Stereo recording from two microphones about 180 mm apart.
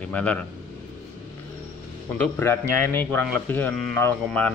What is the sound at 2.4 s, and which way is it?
A man's voice, 15° left (ahead or behind).